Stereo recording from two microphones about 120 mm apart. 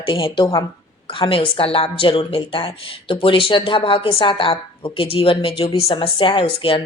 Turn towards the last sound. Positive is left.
turn(degrees=45)  # may be behind; listen again after turning